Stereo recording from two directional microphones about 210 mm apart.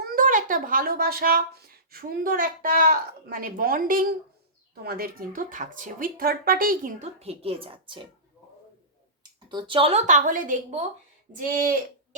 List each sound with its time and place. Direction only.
0.0 s speech: 40° right (ahead or behind); by 8.0 s 25° right (ahead or behind)
9.5 s speech: 20° right (ahead or behind); by 11.8 s 45° right (ahead or behind)